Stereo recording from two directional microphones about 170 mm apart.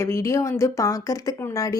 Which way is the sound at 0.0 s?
15° left (ahead or behind).